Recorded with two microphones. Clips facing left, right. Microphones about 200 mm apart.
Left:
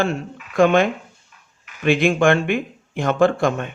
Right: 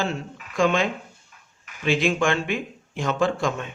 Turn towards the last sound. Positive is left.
turn(degrees=55)  # may be behind; listen again after turning